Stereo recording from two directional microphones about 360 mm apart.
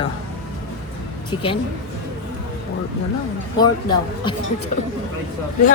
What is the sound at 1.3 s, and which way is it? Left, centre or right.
Speech, left.